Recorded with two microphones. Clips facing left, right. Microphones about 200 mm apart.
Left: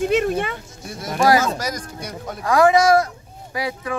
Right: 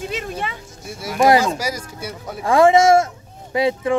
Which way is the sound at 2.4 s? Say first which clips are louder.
Right 2 dB; 25° right (ahead or behind).